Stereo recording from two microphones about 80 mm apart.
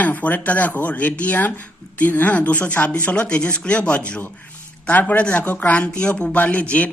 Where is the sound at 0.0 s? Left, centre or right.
Left.